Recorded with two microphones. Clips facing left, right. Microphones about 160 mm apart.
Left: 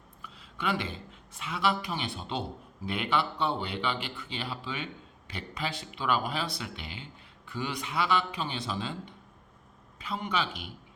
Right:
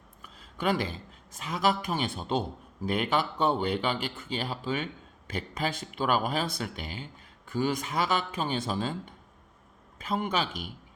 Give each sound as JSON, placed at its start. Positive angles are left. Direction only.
{"t": 0.2, "sound": "speech", "side_deg": -45}